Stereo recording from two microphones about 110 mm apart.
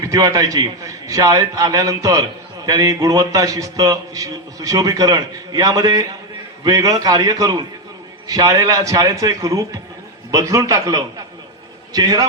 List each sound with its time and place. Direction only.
0.0 s a man's voice: 30° right (ahead or behind)